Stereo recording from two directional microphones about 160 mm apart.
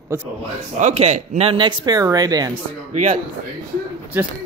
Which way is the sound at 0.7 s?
45° right (ahead or behind).